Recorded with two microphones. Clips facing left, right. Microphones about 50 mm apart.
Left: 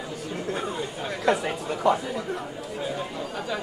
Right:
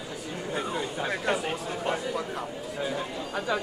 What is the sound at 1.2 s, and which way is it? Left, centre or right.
Speech, left.